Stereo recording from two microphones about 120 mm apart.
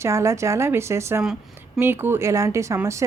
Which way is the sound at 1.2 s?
5° right (ahead or behind).